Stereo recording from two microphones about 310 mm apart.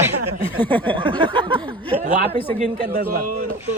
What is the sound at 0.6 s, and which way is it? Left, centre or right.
Speech, centre.